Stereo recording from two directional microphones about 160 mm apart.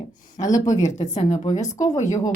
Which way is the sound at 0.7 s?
45° left (ahead or behind).